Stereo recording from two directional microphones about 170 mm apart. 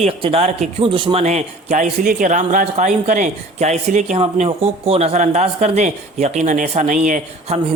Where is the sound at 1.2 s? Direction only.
40° right (ahead or behind).